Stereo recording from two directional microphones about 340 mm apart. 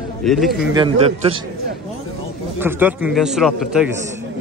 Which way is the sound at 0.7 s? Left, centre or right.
Centre.